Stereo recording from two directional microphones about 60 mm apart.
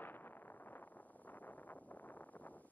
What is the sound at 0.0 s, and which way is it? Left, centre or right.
Wind noise, left.